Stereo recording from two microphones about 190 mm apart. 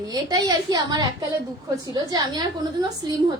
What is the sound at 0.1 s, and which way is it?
A woman's voice, 20° right (ahead or behind).